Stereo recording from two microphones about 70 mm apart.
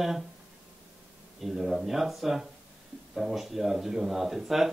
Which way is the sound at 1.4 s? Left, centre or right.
Centre.